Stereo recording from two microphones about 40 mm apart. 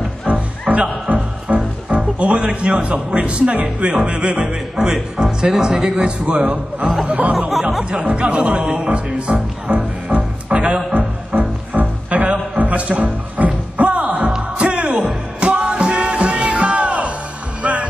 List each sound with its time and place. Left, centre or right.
0.3 s music: right
2.1 s speech: right
4.7 s speech: centre; by 7.3 s right
7.3 s speech: centre
7.9 s speech: right
9.7 s music: right
10.5 s music: right
11.0 s music: right
14.6 s music: right